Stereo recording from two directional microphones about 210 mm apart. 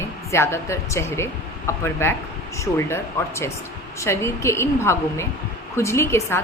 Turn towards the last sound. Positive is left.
turn(degrees=15)  # may be behind; listen again after turning